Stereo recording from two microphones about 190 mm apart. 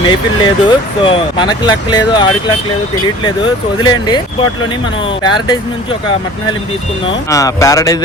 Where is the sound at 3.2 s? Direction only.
25° left (ahead or behind).